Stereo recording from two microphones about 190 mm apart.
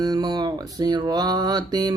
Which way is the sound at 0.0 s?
20° right (ahead or behind).